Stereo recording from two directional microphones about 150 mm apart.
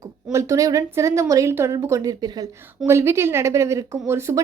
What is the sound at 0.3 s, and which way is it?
A woman's voice, 20° right (ahead or behind).